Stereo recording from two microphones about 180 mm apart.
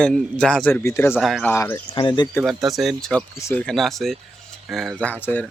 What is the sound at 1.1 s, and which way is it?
Speech, centre (ahead or behind).